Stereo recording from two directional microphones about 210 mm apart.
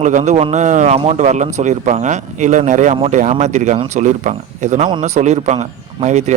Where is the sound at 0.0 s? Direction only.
35° right (ahead or behind).